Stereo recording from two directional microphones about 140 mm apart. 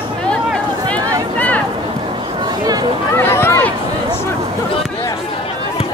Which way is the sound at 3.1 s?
15° left (ahead or behind).